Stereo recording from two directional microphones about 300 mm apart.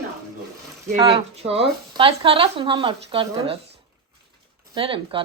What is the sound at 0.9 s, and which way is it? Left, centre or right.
Speech, centre.